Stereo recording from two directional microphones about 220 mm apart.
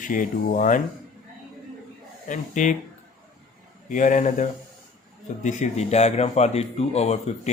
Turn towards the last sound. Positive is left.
turn(degrees=30)  # may be behind; listen again after turning